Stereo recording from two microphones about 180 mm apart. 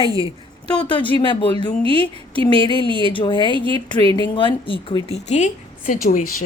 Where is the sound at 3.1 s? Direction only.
25° left (ahead or behind).